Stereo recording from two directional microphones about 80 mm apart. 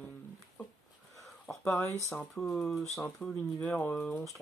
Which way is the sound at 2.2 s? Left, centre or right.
Centre.